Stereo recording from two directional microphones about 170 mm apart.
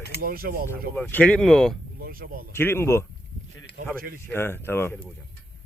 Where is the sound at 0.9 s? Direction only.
10° left (ahead or behind).